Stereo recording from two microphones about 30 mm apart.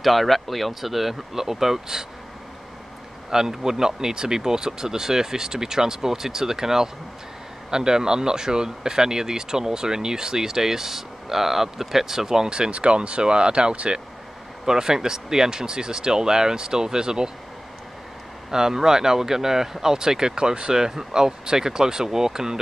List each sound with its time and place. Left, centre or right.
0.0 s speech: centre
3.3 s speech: centre
12.4 s speech: right
14.7 s speech: centre
18.5 s speech: centre